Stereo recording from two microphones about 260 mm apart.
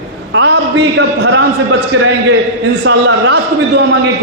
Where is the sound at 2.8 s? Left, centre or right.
Right.